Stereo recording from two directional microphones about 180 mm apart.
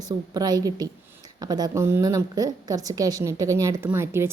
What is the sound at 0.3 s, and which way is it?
A woman's voice, 20° right (ahead or behind).